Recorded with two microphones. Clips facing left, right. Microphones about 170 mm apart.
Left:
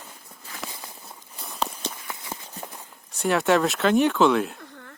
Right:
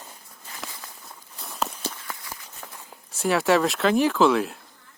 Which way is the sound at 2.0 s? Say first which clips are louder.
Left 2 dB; 20° left (ahead or behind).